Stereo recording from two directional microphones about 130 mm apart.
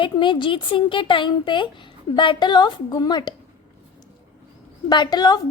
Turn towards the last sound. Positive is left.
turn(degrees=30)  # may be behind; listen again after turning